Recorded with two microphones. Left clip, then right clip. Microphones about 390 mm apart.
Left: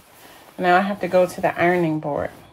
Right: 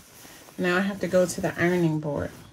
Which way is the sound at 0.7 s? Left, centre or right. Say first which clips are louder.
Left 6 dB; right.